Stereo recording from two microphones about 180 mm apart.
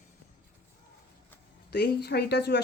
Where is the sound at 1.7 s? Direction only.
65° left (ahead or behind).